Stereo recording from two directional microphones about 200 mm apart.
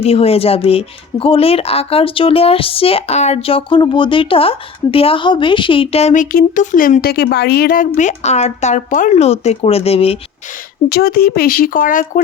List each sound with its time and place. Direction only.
0.0 s speech: 30° left (ahead or behind)
10.8 s speech: 50° left (ahead or behind)